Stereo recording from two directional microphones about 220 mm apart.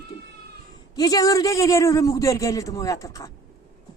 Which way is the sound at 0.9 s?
15° left (ahead or behind).